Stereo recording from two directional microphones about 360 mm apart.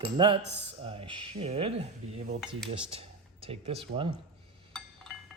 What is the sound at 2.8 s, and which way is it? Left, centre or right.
Speech, centre.